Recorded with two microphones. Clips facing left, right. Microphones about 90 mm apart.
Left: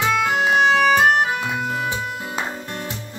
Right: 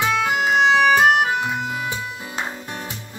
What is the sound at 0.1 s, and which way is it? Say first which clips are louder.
Music: left 1 dB; 5° right (ahead or behind).